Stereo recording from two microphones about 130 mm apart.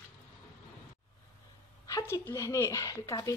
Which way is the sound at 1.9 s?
25° left (ahead or behind).